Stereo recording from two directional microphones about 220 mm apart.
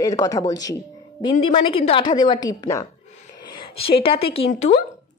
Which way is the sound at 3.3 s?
20° left (ahead or behind).